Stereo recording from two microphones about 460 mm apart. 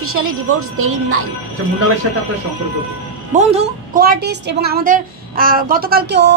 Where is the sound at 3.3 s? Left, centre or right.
Centre.